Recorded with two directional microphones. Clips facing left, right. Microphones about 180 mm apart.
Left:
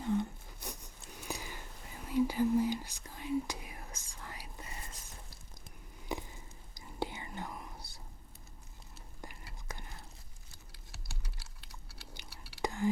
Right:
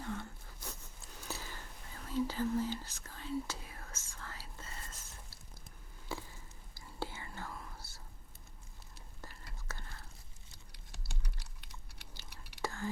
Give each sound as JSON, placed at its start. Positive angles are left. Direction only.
{"t": 0.0, "sound": "a sound", "side_deg": 15}
{"t": 6.1, "sound": "whispering", "side_deg": 20}
{"t": 9.2, "sound": "whispering", "side_deg": 15}
{"t": 10.5, "sound": "typing", "side_deg": 5}
{"t": 12.1, "sound": "whispering", "side_deg": 10}